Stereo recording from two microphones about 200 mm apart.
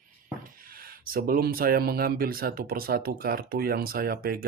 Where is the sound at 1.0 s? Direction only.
45° right (ahead or behind).